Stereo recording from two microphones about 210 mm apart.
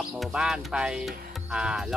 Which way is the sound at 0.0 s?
5° right (ahead or behind).